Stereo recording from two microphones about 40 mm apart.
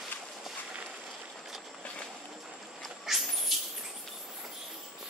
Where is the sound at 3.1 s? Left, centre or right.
Centre.